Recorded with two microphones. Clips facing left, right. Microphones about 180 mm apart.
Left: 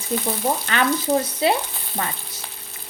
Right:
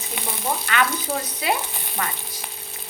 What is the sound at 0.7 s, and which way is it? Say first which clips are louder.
Frying: even; 35° left (ahead or behind).